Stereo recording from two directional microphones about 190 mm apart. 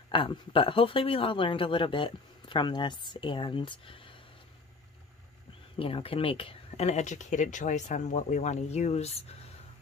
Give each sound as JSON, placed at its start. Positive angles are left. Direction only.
{"t": 0.1, "sound": "speech", "side_deg": 25}
{"t": 5.8, "sound": "speech", "side_deg": 30}